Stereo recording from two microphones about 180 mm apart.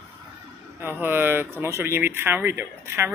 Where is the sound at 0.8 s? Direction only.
10° right (ahead or behind).